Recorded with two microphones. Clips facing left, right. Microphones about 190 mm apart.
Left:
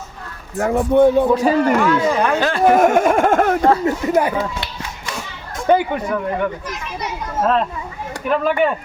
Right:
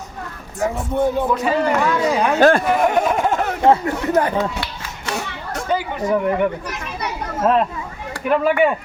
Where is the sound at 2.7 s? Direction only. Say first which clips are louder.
Left 4 dB; 45° left (ahead or behind).